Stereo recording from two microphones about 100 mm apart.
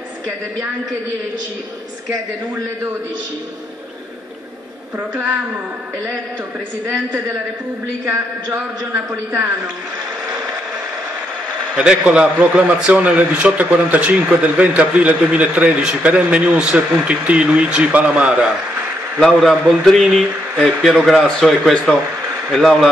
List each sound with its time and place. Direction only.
8.0 s a man's voice: 30° right (ahead or behind)
11.7 s a man's voice: 10° right (ahead or behind)
19.1 s speech: 5° left (ahead or behind)